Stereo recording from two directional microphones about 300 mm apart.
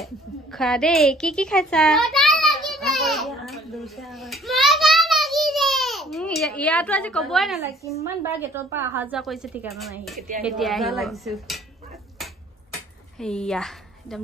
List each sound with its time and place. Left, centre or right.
0.0 s a sound: centre
8.2 s a woman's voice: centre
13.2 s a woman's voice: centre